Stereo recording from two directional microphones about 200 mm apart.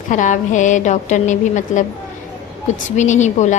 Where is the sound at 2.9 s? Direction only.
35° left (ahead or behind).